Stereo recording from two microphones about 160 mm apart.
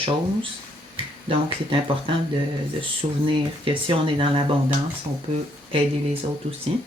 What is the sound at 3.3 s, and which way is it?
Speech, 30° right (ahead or behind).